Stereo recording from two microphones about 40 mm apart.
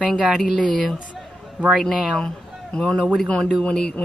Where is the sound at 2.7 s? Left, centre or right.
Centre.